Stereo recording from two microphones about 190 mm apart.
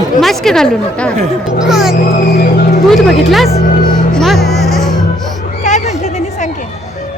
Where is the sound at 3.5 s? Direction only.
30° left (ahead or behind).